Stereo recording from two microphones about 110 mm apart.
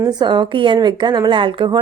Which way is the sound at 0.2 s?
45° right (ahead or behind).